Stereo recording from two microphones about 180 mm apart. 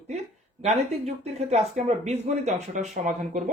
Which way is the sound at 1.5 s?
35° right (ahead or behind).